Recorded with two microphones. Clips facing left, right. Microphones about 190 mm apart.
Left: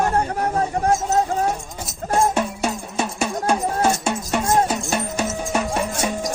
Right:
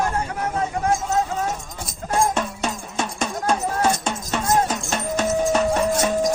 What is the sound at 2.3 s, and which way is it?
Music, 10° left (ahead or behind).